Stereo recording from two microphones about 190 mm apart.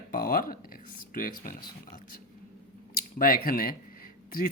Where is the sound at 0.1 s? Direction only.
50° left (ahead or behind).